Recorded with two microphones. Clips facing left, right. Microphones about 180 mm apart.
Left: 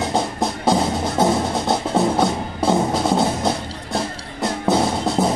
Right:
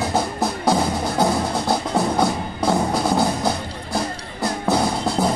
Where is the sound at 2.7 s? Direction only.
Centre (ahead or behind).